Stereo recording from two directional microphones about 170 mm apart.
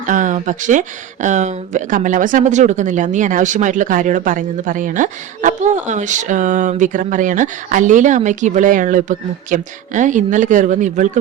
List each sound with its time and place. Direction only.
0.0 s speech: 50° right (ahead or behind)